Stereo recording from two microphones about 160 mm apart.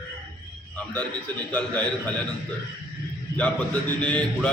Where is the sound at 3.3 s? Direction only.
10° left (ahead or behind).